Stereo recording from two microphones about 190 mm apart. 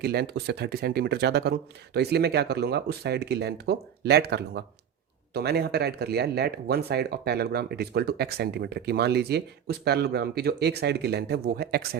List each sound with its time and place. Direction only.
0.0 s speech: 55° right (ahead or behind)